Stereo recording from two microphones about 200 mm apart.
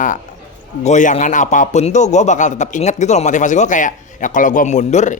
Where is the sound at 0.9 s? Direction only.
35° left (ahead or behind).